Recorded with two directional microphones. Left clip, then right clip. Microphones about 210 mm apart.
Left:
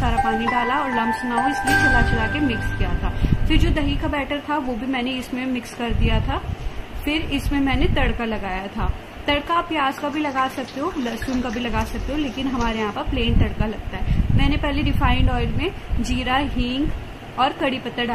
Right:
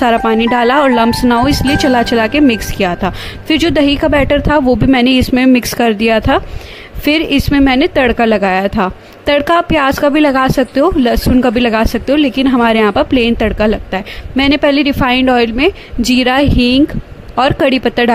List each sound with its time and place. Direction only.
0.0 s a woman's voice: 55° right (ahead or behind)